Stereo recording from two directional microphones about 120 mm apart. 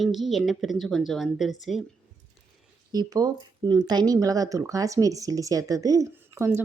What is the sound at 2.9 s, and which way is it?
A woman's voice, 30° right (ahead or behind).